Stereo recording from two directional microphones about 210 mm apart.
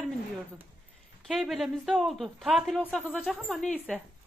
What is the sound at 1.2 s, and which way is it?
Speech, centre (ahead or behind).